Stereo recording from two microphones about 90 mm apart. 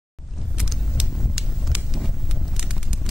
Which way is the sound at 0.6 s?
5° right (ahead or behind).